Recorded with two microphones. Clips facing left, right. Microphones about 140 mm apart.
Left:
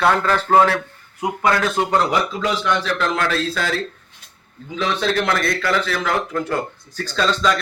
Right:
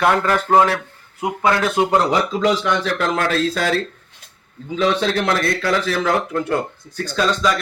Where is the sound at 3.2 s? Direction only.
45° right (ahead or behind).